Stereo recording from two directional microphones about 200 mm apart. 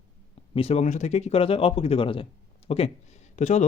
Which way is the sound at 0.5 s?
30° left (ahead or behind).